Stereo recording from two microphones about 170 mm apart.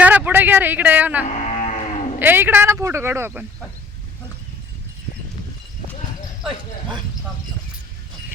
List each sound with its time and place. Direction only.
0.0 s a sound: 10° right (ahead or behind)
1.2 s cattle: 40° left (ahead or behind)
2.1 s speech: 10° right (ahead or behind)